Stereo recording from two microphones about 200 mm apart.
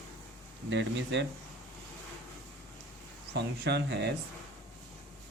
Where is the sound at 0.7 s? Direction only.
65° right (ahead or behind).